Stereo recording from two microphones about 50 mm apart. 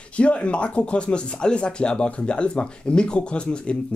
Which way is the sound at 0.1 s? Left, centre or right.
Left.